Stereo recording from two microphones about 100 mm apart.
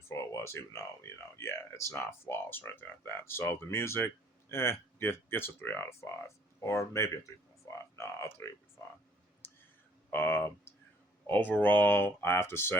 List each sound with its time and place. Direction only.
0.1 s speech: 25° left (ahead or behind)
9.4 s a sound: 20° left (ahead or behind)
10.1 s speech: 20° left (ahead or behind)